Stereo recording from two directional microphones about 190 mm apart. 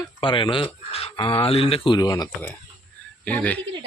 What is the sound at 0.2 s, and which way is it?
Speech, 25° left (ahead or behind).